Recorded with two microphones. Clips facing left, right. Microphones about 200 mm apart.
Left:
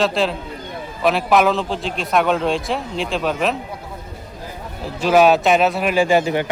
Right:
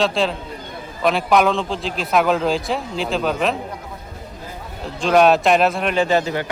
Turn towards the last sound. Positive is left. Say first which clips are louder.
# left 2 dB
turn(degrees=15)  # may be behind; listen again after turning